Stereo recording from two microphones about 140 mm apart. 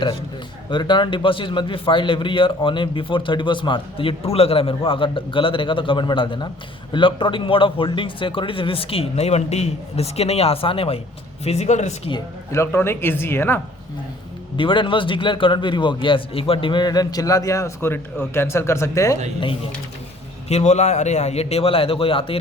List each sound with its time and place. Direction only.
0.7 s a man's voice: 35° left (ahead or behind); by 12.1 s 55° left (ahead or behind)
12.5 s speech: 20° left (ahead or behind)
14.5 s a man's voice: 35° left (ahead or behind); by 19.1 s 20° left (ahead or behind)
20.5 s a man's voice: 50° left (ahead or behind)